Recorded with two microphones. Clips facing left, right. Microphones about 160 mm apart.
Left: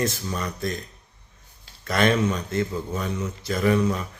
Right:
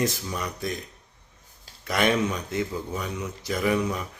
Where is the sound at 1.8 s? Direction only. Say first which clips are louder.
Left 2 dB; 15° right (ahead or behind).